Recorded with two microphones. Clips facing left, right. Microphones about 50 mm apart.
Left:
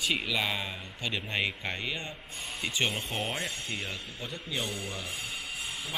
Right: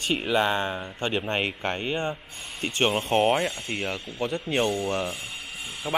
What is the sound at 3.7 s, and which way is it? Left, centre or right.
Speech, right.